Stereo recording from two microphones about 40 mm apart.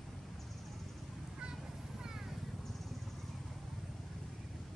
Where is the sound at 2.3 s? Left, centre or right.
Centre.